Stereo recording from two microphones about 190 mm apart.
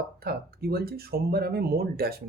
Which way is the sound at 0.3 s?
55° right (ahead or behind).